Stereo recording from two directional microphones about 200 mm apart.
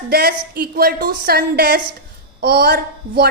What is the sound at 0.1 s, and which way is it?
A woman's voice, 50° right (ahead or behind).